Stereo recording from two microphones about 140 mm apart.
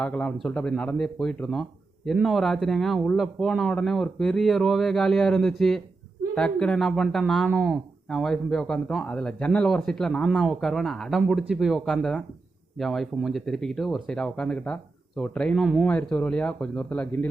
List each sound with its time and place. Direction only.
0.0 s speech: 10° left (ahead or behind)